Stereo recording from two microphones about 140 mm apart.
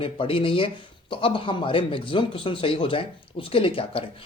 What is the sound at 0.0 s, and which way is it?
Speech, 40° left (ahead or behind).